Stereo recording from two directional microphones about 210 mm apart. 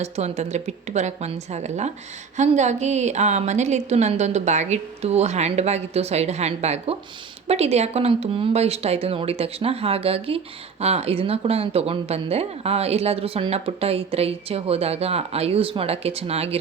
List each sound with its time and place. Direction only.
0.0 s a woman's voice: 30° right (ahead or behind)